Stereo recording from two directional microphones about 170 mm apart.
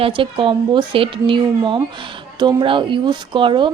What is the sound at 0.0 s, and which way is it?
Speech, 30° right (ahead or behind).